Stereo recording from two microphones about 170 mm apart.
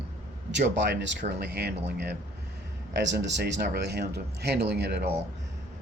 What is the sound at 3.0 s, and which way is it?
Speech, 90° right.